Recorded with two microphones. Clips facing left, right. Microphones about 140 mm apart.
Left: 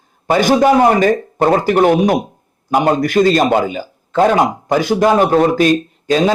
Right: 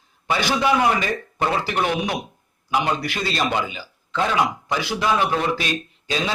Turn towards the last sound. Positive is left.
turn(degrees=45)  # may be behind; listen again after turning